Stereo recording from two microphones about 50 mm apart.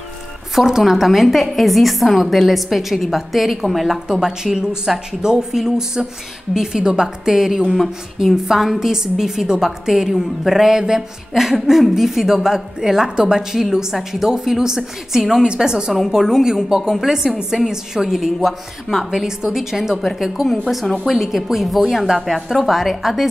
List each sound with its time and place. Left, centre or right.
0.6 s a woman's voice: centre
19.0 s a woman's voice: centre
20.6 s speech: centre
21.0 s a woman's voice: centre